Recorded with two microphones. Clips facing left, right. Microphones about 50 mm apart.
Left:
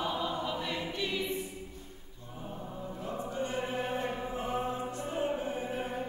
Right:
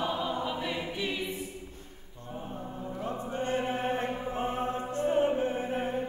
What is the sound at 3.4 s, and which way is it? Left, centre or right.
Music, right.